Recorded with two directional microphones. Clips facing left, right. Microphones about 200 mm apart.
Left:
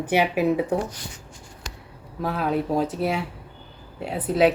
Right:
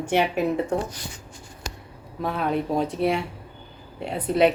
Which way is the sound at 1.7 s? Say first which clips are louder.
Right 4 dB; 40° right (ahead or behind).